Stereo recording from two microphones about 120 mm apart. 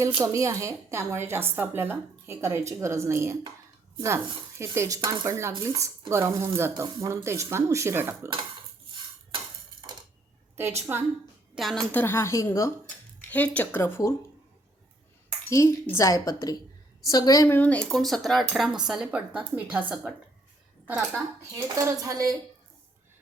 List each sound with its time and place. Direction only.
0.0 s a woman's voice: 25° right (ahead or behind)
10.6 s a woman's voice: 20° right (ahead or behind)
11.5 s speech: centre (ahead or behind)
11.9 s a woman's voice: 20° left (ahead or behind)
13.3 s speech: 10° left (ahead or behind)
15.4 s a woman's voice: 25° left (ahead or behind)
17.5 s speech: 10° left (ahead or behind)
17.8 s speech: centre (ahead or behind)
20.8 s speech: 15° right (ahead or behind)
21.5 s a woman's voice: 25° right (ahead or behind)